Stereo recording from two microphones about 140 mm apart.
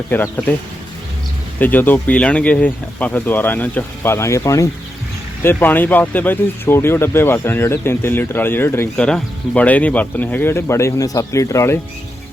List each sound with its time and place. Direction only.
0.1 s speech: 15° left (ahead or behind)
1.5 s speech: 15° left (ahead or behind)